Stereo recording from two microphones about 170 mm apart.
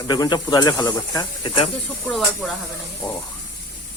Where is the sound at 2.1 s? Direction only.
Centre (ahead or behind).